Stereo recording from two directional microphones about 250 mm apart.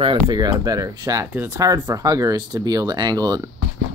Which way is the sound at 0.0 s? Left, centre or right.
Centre.